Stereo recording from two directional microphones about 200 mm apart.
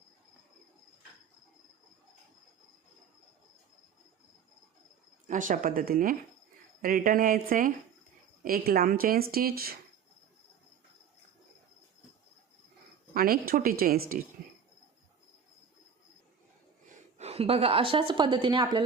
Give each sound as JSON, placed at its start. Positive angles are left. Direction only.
{"t": 5.3, "sound": "speech", "side_deg": -40}
{"t": 13.1, "sound": "speech", "side_deg": -50}
{"t": 17.2, "sound": "a woman's voice", "side_deg": -30}